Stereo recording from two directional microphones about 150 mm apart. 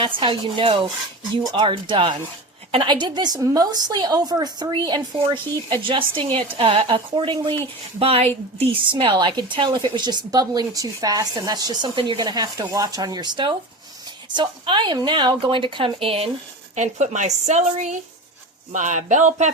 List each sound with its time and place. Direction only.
0.0 s a woman's voice: 35° right (ahead or behind)
16.7 s a woman's voice: 50° right (ahead or behind)